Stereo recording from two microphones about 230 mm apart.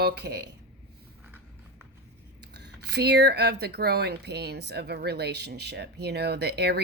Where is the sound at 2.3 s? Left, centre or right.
Right.